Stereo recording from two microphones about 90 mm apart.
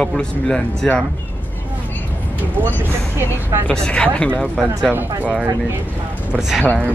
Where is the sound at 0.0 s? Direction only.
10° left (ahead or behind).